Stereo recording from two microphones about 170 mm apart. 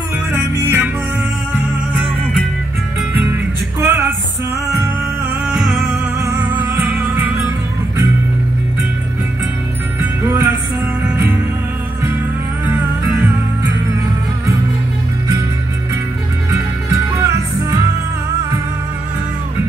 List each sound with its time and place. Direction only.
0.6 s music: 15° right (ahead or behind)
3.8 s music: 15° right (ahead or behind)
6.3 s music: 10° right (ahead or behind)
10.2 s music: 10° right (ahead or behind)
16.9 s music: 15° right (ahead or behind)